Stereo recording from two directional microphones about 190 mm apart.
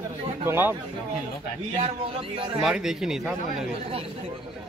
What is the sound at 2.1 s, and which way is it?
Speech, 30° right (ahead or behind).